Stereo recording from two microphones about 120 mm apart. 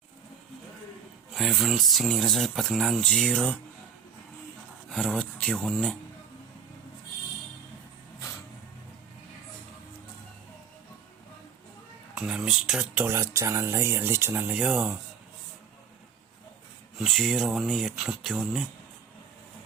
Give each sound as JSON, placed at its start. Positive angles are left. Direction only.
{"t": 1.3, "sound": "speech", "side_deg": 0}
{"t": 4.9, "sound": "speech", "side_deg": 5}
{"t": 12.1, "sound": "speech", "side_deg": -5}
{"t": 13.1, "sound": "speech", "side_deg": -20}
{"t": 14.5, "sound": "speech", "side_deg": -5}
{"t": 17.0, "sound": "speech", "side_deg": 0}